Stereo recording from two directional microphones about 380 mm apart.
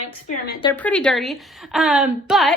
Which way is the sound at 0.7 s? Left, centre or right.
Centre.